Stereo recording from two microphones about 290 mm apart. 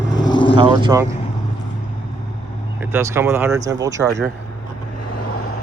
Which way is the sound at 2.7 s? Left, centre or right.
Centre.